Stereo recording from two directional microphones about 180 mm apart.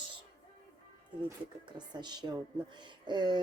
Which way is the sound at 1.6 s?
25° right (ahead or behind).